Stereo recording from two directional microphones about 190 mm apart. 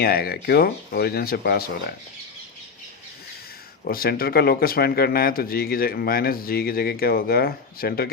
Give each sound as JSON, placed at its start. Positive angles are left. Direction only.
{"t": 0.0, "sound": "speech", "side_deg": 55}
{"t": 3.8, "sound": "speech", "side_deg": 55}